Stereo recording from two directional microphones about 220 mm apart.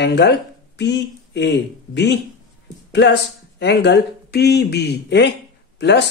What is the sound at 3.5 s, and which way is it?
Speech, 50° left (ahead or behind).